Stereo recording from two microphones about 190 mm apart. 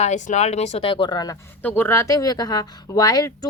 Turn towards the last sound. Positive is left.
turn(degrees=20)  # may be behind; listen again after turning